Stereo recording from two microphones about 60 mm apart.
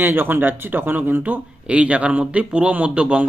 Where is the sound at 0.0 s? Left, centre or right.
Right.